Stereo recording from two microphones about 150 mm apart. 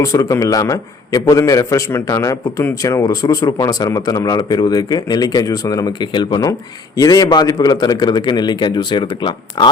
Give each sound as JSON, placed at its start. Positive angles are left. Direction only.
{"t": 0.0, "sound": "a man's voice", "side_deg": 20}